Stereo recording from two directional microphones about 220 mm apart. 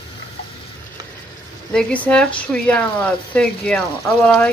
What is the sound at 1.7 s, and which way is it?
Speech, 5° left (ahead or behind).